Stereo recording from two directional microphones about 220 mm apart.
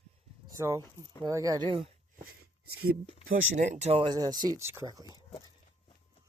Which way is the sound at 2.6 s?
75° right (ahead or behind).